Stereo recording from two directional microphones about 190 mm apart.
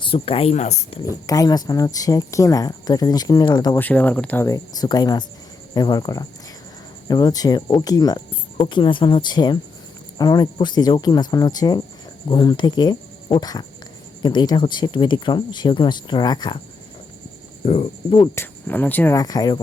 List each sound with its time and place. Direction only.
0.0 s speech: 30° left (ahead or behind)
1.3 s speech: 20° left (ahead or behind)
3.8 s speech: 10° left (ahead or behind)
17.7 s speech: 30° left (ahead or behind)
18.3 s speech: 10° left (ahead or behind)